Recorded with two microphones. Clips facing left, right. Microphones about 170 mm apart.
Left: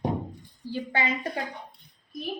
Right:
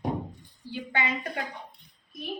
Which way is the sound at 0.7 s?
35° left (ahead or behind).